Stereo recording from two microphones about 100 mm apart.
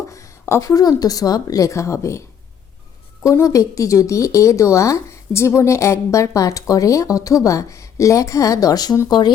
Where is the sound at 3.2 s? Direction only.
30° left (ahead or behind).